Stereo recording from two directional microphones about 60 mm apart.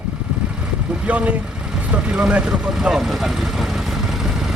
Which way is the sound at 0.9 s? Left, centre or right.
Centre.